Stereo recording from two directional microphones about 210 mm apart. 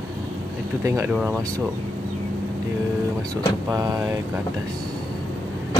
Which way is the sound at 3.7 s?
15° right (ahead or behind).